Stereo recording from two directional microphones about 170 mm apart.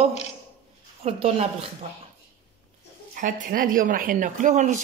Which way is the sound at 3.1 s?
50° right (ahead or behind).